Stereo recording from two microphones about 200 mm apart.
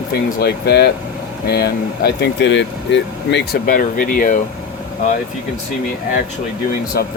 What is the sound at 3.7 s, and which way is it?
Speech, 45° left (ahead or behind).